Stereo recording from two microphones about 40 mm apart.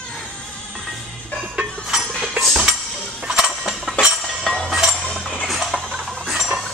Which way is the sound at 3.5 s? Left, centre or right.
Centre.